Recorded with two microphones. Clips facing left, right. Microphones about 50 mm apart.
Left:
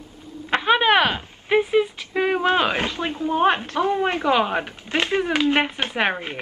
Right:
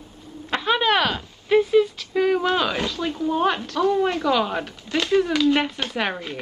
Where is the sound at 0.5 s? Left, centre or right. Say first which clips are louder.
Left 3 dB; left.